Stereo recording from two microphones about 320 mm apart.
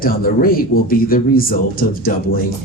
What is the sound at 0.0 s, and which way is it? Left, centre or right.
Speech, left.